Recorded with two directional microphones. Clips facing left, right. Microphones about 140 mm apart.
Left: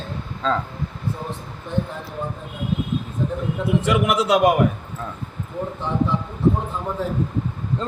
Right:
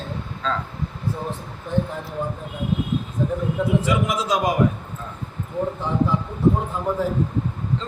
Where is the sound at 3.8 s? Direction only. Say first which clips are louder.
Left 3 dB; 70° left (ahead or behind).